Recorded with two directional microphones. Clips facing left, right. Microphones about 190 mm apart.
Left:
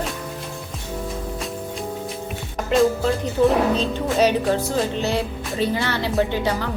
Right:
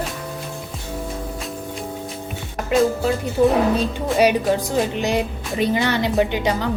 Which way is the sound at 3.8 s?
15° right (ahead or behind).